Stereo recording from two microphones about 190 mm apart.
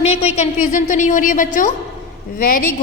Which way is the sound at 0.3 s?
40° left (ahead or behind).